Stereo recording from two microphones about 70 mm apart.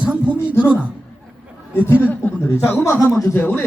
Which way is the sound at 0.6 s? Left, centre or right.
Centre.